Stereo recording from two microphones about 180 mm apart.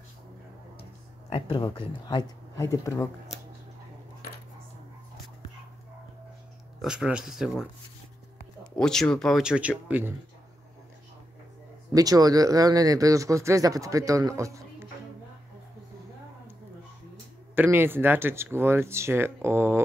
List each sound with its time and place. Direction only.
1.3 s speech: 30° left (ahead or behind)
6.8 s speech: 5° right (ahead or behind)
8.7 s speech: 5° left (ahead or behind)
11.9 s speech: 20° right (ahead or behind)
17.6 s speech: 10° right (ahead or behind)